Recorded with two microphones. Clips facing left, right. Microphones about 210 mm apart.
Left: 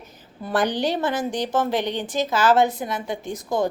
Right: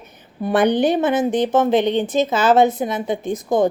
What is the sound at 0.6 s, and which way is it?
Speech, 55° right (ahead or behind).